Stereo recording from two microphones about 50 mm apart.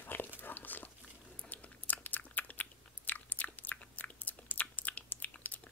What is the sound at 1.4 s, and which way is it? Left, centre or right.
Biting, left.